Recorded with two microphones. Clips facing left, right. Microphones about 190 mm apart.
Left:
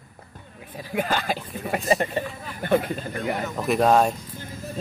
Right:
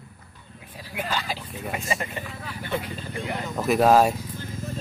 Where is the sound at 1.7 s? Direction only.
35° left (ahead or behind).